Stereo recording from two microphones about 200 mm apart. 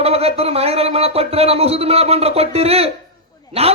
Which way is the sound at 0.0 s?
30° right (ahead or behind).